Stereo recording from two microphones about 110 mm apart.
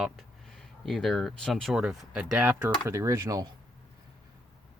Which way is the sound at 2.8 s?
25° right (ahead or behind).